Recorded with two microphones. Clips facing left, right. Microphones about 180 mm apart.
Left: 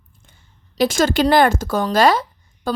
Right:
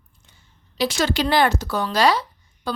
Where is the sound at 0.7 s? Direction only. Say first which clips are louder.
Left 5 dB; 50° left (ahead or behind).